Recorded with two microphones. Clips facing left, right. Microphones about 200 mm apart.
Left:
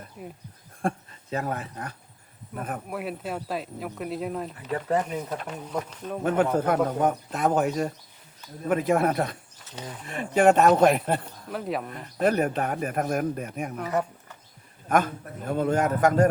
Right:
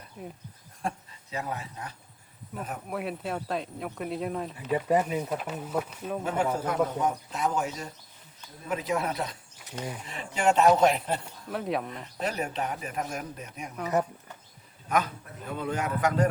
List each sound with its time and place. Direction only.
0.2 s speech: centre (ahead or behind)
0.8 s a man's voice: 55° left (ahead or behind)
2.9 s speech: centre (ahead or behind)
6.2 s a man's voice: 60° left (ahead or behind)
11.5 s speech: centre (ahead or behind)
12.2 s a man's voice: 55° left (ahead or behind)
14.8 s a man's voice: 50° left (ahead or behind)